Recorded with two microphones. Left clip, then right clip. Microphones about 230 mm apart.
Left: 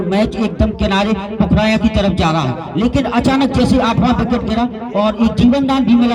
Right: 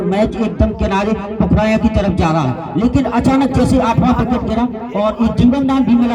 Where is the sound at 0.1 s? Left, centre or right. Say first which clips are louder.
Even; left.